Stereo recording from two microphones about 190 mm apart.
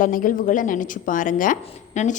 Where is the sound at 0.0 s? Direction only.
45° left (ahead or behind).